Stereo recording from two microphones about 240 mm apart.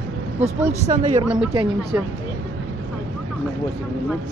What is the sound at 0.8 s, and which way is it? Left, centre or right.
Speech, right.